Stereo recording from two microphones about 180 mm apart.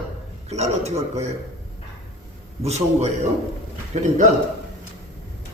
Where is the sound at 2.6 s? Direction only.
35° right (ahead or behind).